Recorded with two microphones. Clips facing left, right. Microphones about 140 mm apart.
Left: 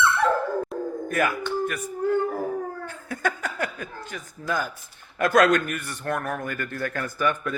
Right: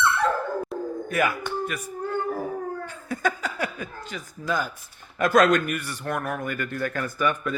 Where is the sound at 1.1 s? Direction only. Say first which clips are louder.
Even; 50° left (ahead or behind).